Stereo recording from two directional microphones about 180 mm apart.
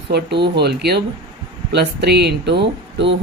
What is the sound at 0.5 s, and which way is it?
Speech, 65° right (ahead or behind).